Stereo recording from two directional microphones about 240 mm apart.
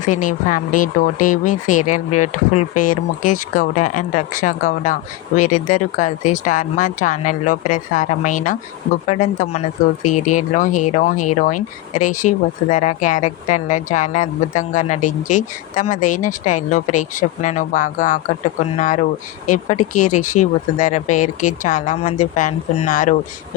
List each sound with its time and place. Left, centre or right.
0.0 s speech: left
19.5 s speech: left